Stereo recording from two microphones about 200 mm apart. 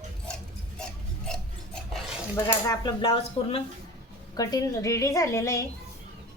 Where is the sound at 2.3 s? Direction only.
20° left (ahead or behind).